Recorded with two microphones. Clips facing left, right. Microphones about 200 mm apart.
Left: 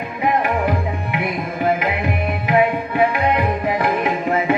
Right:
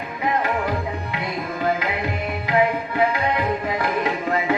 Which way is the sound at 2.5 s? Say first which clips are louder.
Left 3 dB; 20° left (ahead or behind).